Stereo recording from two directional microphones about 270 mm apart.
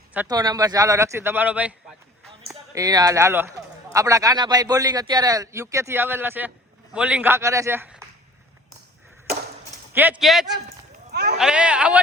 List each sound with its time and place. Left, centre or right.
0.1 s a man's voice: centre
2.7 s a man's voice: centre
9.9 s speech: centre
11.1 s a sound: right
11.3 s speech: centre